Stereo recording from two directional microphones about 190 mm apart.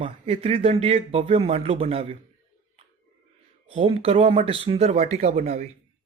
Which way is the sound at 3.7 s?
30° right (ahead or behind).